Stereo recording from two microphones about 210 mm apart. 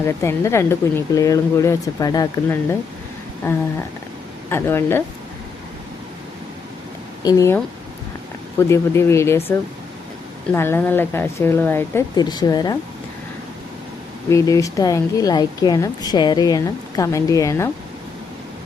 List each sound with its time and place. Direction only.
0.0 s a woman's voice: 15° left (ahead or behind)
4.4 s a woman's voice: 10° left (ahead or behind)
7.2 s a woman's voice: 15° left (ahead or behind)
10.5 s a woman's voice: 10° left (ahead or behind)
14.3 s a woman's voice: 15° left (ahead or behind)